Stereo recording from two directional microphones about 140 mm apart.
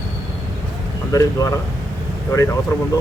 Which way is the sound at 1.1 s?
25° left (ahead or behind).